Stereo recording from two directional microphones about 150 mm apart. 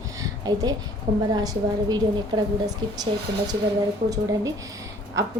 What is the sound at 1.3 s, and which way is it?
A woman's voice, 25° right (ahead or behind).